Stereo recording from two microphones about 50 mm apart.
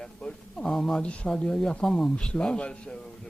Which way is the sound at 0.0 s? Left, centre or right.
Centre.